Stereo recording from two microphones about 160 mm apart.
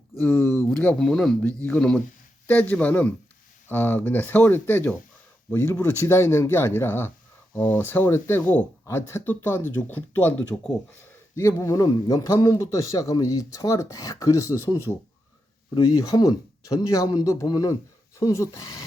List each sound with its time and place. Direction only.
0.2 s speech: 10° left (ahead or behind)
16.0 s speech: 20° left (ahead or behind)